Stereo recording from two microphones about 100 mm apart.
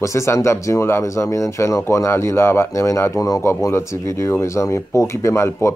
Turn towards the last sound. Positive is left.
turn(degrees=30)  # may be behind; listen again after turning